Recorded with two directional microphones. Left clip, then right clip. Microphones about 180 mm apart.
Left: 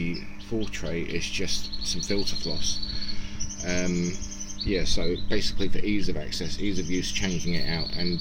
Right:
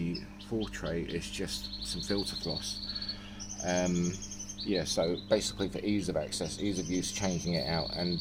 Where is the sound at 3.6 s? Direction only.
15° right (ahead or behind).